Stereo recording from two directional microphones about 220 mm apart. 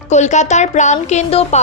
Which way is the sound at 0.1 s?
30° left (ahead or behind).